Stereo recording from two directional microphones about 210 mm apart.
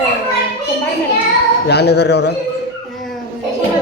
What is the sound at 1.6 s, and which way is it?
Speech, 50° left (ahead or behind).